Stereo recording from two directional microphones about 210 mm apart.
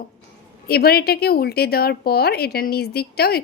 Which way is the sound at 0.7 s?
50° left (ahead or behind).